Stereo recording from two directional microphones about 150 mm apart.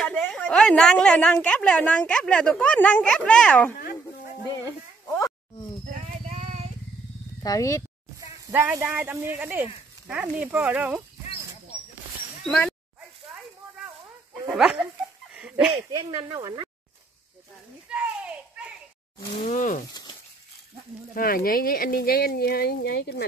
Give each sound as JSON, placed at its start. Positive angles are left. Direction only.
{"t": 0.0, "sound": "a woman's voice", "side_deg": 5}
{"t": 5.0, "sound": "a sound", "side_deg": 20}
{"t": 7.4, "sound": "speech", "side_deg": 20}
{"t": 8.3, "sound": "speech", "side_deg": -15}
{"t": 12.4, "sound": "speech", "side_deg": 5}
{"t": 14.5, "sound": "speech", "side_deg": -5}
{"t": 15.3, "sound": "a sound", "side_deg": -5}
{"t": 15.7, "sound": "speech", "side_deg": -30}
{"t": 17.8, "sound": "children playing", "side_deg": -10}
{"t": 19.4, "sound": "speech", "side_deg": 60}
{"t": 19.9, "sound": "a sound", "side_deg": 25}
{"t": 21.1, "sound": "speech", "side_deg": 75}